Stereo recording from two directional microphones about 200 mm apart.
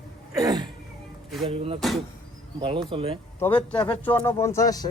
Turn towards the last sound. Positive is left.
turn(degrees=20)  # may be behind; listen again after turning